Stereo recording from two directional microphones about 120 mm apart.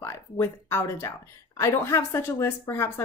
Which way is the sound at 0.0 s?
20° left (ahead or behind).